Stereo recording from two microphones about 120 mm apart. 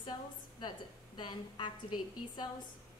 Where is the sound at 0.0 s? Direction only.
40° left (ahead or behind).